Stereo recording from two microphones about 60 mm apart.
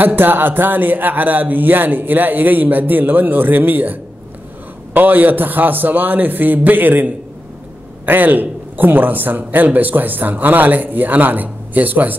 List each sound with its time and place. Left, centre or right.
0.0 s a man's voice: right